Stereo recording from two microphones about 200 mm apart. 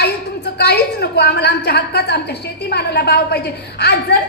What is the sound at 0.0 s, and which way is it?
A woman's voice, 55° left (ahead or behind).